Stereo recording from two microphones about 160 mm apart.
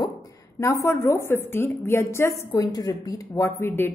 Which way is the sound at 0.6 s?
20° left (ahead or behind).